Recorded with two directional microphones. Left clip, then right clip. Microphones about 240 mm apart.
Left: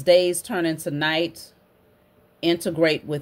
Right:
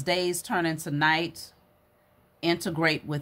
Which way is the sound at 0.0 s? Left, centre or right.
Centre.